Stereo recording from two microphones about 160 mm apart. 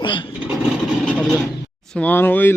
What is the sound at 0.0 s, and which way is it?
Vehicle, 30° left (ahead or behind).